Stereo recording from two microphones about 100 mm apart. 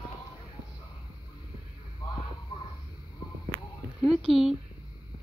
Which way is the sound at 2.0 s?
55° left (ahead or behind).